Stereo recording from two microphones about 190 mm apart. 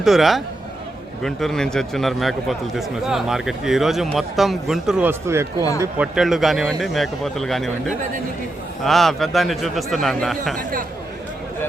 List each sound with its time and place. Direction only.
0.0 s speech: centre (ahead or behind)
10.6 s speech: 50° right (ahead or behind)